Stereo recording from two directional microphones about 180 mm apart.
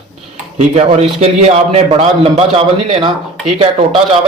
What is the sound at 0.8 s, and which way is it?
A man's voice, 35° right (ahead or behind).